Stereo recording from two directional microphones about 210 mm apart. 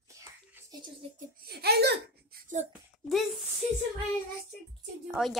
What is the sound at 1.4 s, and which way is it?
Speech, 50° right (ahead or behind).